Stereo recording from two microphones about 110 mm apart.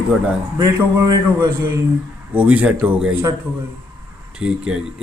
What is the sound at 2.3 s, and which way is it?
Speech, 10° right (ahead or behind).